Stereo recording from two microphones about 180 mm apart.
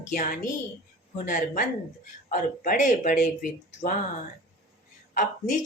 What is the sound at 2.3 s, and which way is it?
Speech, 45° left (ahead or behind).